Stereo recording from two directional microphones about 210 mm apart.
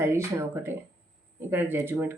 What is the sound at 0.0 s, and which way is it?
Speech, 10° right (ahead or behind).